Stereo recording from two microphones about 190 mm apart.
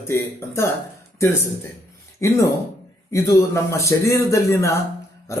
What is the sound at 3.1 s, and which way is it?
A man's voice, 15° left (ahead or behind).